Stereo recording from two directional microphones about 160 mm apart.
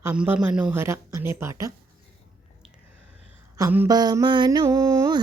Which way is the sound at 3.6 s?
15° right (ahead or behind).